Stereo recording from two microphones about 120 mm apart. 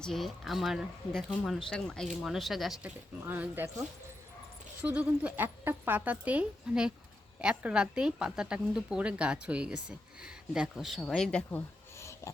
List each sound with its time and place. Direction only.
0.0 s speech: centre (ahead or behind)
3.2 s a woman's voice: 15° right (ahead or behind); by 11.6 s 5° left (ahead or behind)
11.9 s a sound: 25° left (ahead or behind)